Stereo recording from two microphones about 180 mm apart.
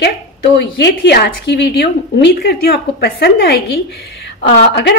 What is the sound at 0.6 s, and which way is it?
A woman's voice, 70° left (ahead or behind).